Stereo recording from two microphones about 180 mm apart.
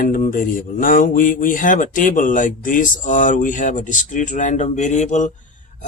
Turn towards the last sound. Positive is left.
turn(degrees=40)  # may be behind; listen again after turning